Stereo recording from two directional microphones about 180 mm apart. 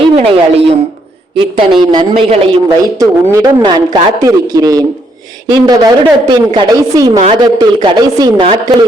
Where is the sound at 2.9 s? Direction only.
15° right (ahead or behind).